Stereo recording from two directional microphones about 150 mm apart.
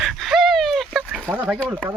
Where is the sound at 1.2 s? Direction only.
10° right (ahead or behind).